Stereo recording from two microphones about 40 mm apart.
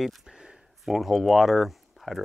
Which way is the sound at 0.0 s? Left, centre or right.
Centre.